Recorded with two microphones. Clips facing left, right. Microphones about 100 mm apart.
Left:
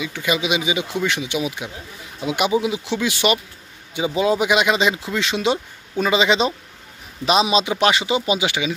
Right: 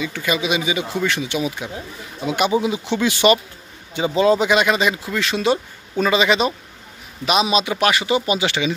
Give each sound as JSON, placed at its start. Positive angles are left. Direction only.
{"t": 0.0, "sound": "speech", "side_deg": 15}